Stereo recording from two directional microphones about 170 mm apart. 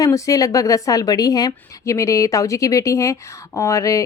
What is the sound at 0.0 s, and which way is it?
Speech, 20° left (ahead or behind).